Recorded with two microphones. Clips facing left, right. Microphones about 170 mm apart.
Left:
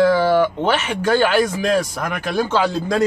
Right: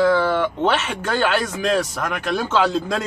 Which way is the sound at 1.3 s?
10° left (ahead or behind).